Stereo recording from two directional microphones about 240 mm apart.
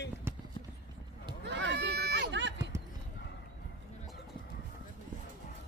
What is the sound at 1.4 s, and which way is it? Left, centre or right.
Run, right.